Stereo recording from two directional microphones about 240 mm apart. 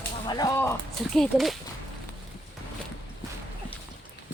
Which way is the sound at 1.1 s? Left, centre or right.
Centre.